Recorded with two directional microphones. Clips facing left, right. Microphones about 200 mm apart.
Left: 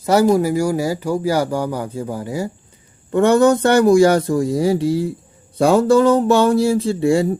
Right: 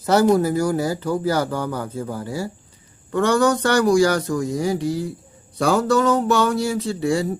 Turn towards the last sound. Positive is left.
turn(degrees=25)  # may be behind; listen again after turning